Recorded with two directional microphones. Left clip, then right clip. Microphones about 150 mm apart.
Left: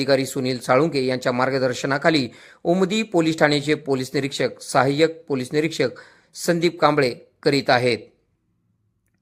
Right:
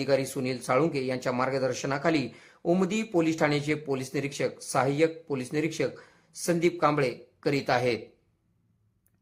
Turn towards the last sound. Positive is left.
turn(degrees=30)  # may be behind; listen again after turning